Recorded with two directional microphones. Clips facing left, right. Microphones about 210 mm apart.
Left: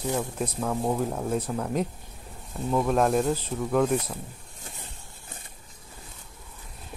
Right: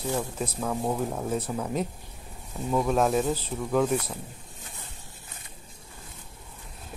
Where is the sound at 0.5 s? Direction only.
Centre (ahead or behind).